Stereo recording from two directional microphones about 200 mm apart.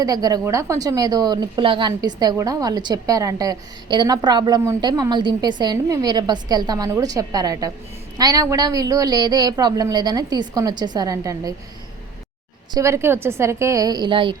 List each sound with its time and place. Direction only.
0.0 s a woman's voice: 20° right (ahead or behind)
12.7 s a woman's voice: 15° right (ahead or behind)